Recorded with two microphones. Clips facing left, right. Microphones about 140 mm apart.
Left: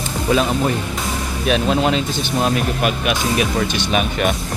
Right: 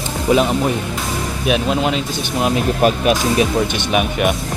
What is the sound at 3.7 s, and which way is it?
Speech, 15° right (ahead or behind).